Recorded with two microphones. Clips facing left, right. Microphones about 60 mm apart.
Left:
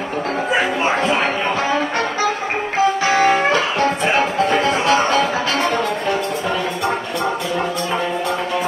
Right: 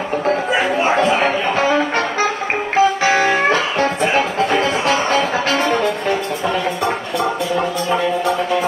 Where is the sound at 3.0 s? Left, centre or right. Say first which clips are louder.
Even; right.